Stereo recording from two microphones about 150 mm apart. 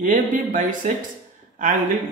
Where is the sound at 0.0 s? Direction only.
60° right (ahead or behind).